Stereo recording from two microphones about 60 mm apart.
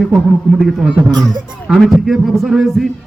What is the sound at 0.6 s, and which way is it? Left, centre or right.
A man's voice, centre.